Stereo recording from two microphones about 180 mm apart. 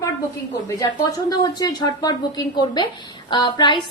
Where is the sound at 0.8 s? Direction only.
20° left (ahead or behind).